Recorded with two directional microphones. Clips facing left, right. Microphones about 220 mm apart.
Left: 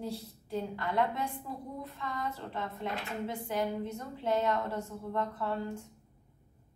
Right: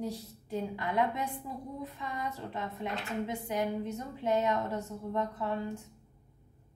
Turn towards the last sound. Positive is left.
turn(degrees=-15)  # may be behind; listen again after turning